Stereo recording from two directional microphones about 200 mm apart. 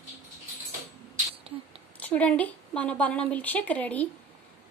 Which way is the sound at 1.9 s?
5° left (ahead or behind).